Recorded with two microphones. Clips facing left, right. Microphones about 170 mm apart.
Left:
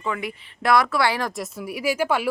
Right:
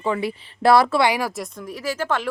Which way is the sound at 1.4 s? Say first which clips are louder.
Left 1 dB; 10° left (ahead or behind).